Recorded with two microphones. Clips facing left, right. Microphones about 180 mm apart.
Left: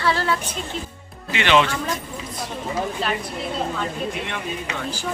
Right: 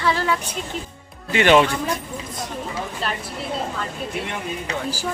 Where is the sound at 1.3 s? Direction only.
45° right (ahead or behind).